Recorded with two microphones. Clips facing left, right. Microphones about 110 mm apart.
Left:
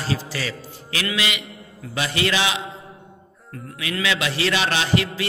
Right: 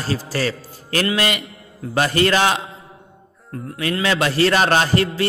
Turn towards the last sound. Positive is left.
turn(degrees=-40)  # may be behind; listen again after turning